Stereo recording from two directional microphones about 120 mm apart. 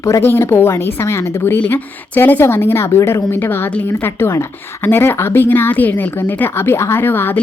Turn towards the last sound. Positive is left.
turn(degrees=15)  # may be behind; listen again after turning